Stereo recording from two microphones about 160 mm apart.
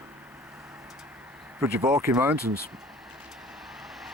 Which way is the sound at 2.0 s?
15° right (ahead or behind).